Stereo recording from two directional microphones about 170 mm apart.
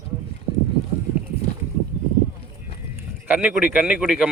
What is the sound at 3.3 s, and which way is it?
Speech, 5° right (ahead or behind).